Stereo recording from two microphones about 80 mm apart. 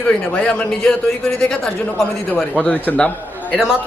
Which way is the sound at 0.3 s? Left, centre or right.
Centre.